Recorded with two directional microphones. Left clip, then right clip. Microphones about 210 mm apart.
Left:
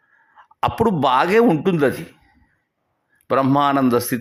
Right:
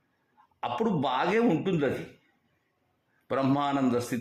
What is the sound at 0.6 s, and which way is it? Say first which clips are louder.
Speech: left 11 dB; 30° left (ahead or behind).